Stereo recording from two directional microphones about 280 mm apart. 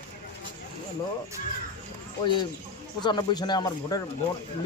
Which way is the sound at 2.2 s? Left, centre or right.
Centre.